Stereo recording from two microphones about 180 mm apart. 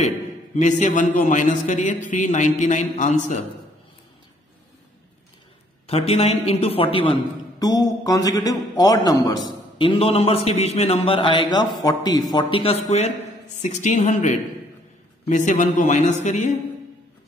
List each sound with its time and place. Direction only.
0.6 s speech: 40° left (ahead or behind)
5.9 s a man's voice: 35° left (ahead or behind)
13.6 s speech: 40° left (ahead or behind)